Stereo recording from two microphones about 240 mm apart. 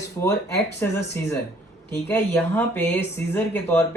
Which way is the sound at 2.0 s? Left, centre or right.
Centre.